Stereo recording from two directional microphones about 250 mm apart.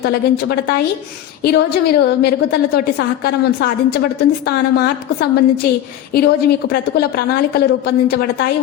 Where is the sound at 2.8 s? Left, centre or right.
Left.